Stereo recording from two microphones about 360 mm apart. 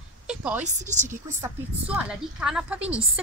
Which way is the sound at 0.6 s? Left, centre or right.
Centre.